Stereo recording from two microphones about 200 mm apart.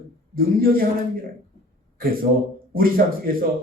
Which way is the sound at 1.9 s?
45° right (ahead or behind).